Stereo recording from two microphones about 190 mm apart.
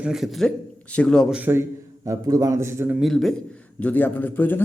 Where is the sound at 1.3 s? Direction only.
10° right (ahead or behind).